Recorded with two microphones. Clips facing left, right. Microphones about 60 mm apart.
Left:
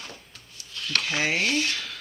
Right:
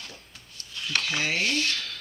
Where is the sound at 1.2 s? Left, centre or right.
Centre.